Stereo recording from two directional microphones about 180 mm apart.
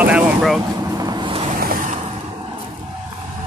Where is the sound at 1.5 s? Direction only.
50° right (ahead or behind).